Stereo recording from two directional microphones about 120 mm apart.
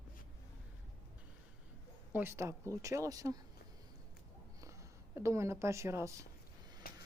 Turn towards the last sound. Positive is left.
turn(degrees=-25)  # may be behind; listen again after turning